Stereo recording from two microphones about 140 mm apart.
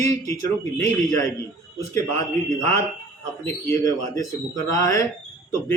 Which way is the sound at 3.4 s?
20° left (ahead or behind).